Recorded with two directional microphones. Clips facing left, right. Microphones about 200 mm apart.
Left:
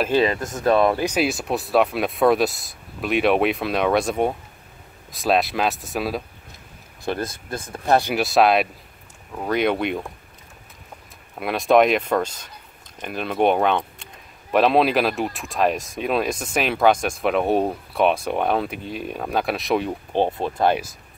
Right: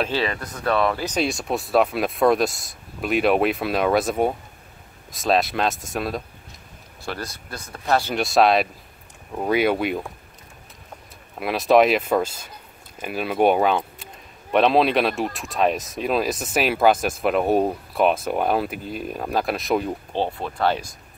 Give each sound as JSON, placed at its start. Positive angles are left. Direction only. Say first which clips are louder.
{"t": 0.1, "sound": "speech", "louder": "left 6 dB", "side_deg": 20}
{"t": 1.1, "sound": "speech", "louder": "left 1 dB", "side_deg": 0}
{"t": 7.2, "sound": "speech", "louder": "left 5 dB", "side_deg": 50}
{"t": 8.1, "sound": "speech", "louder": "even", "side_deg": 0}
{"t": 11.3, "sound": "speech", "louder": "even", "side_deg": 0}
{"t": 20.1, "sound": "speech", "louder": "left 4 dB", "side_deg": 20}